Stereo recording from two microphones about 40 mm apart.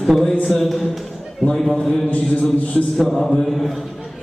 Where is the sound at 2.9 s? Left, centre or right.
Centre.